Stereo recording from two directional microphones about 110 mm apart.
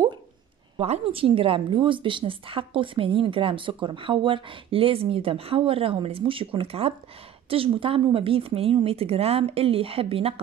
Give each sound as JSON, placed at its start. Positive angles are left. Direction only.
{"t": 0.7, "sound": "a woman's voice", "side_deg": -65}